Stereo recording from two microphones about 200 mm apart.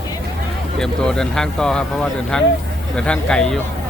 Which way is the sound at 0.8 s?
5° left (ahead or behind).